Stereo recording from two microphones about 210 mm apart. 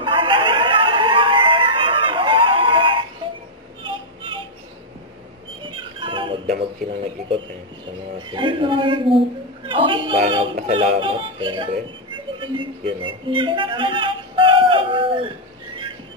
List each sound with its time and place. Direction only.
0.0 s music: 25° right (ahead or behind)
5.6 s music: 25° right (ahead or behind)
7.2 s a man's voice: 25° right (ahead or behind)
12.1 s music: 25° right (ahead or behind)